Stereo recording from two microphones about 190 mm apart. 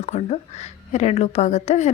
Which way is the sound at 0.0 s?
35° left (ahead or behind).